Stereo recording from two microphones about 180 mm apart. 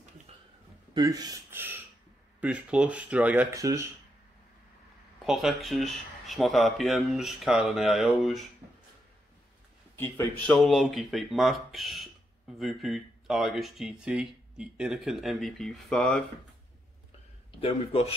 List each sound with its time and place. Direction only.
0.9 s speech: 20° right (ahead or behind)
5.2 s speech: centre (ahead or behind)
9.9 s speech: 10° left (ahead or behind)
17.5 s a man's voice: 30° left (ahead or behind)